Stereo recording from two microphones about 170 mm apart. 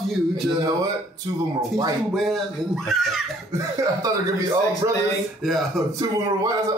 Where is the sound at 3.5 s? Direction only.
20° right (ahead or behind).